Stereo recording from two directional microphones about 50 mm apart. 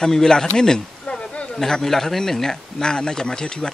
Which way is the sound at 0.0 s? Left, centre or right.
Centre.